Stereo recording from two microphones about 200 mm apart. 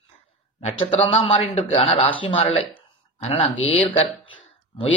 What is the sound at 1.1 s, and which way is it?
A man's voice, 30° left (ahead or behind).